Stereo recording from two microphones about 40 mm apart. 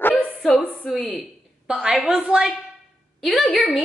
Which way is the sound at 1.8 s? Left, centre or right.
Centre.